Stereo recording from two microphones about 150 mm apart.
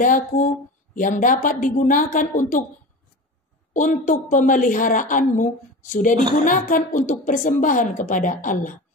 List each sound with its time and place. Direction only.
0.0 s a woman's voice: 60° left (ahead or behind)
3.7 s a woman's voice: 55° left (ahead or behind)